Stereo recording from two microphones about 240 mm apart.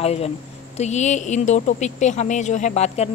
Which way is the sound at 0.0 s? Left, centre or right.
Left.